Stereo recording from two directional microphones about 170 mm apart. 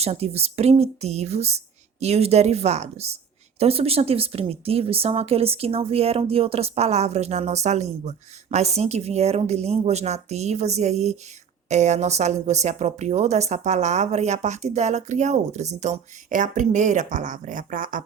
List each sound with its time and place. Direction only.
0.0 s a woman's voice: 35° right (ahead or behind)